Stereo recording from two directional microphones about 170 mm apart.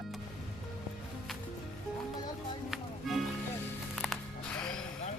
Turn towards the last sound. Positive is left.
turn(degrees=0)  # may be behind; listen again after turning